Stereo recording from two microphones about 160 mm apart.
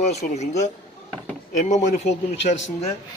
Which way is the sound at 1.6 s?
45° left (ahead or behind).